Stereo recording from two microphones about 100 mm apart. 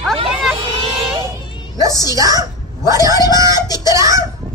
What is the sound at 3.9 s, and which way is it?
Speech, 30° right (ahead or behind).